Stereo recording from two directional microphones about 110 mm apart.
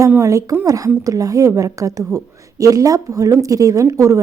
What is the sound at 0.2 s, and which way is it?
A woman's voice, 30° right (ahead or behind).